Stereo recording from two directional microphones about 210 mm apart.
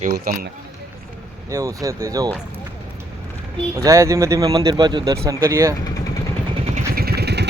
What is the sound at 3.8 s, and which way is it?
Speech, 15° right (ahead or behind).